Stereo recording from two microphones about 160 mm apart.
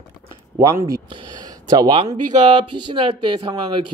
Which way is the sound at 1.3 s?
25° right (ahead or behind).